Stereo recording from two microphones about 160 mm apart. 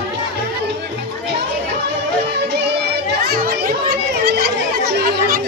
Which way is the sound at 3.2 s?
70° right (ahead or behind).